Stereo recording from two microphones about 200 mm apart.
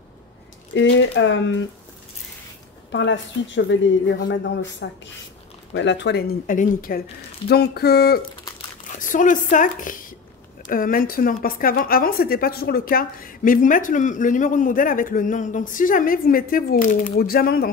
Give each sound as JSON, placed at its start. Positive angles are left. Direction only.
{"t": 0.7, "sound": "speech", "side_deg": 70}
{"t": 2.9, "sound": "speech", "side_deg": 65}
{"t": 6.4, "sound": "a woman's voice", "side_deg": 40}
{"t": 9.0, "sound": "a woman's voice", "side_deg": 40}